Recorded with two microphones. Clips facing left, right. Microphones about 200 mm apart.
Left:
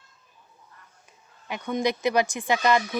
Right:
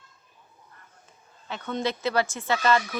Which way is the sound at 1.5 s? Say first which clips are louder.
Left 3 dB; 15° left (ahead or behind).